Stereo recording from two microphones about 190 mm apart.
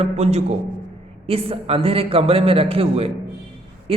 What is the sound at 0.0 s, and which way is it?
A man's voice, 35° right (ahead or behind).